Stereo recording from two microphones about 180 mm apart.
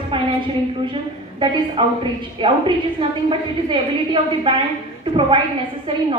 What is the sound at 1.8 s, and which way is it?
A woman's voice, 30° right (ahead or behind).